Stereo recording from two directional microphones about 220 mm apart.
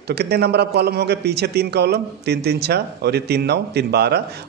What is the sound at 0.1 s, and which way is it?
A man's voice, 45° right (ahead or behind).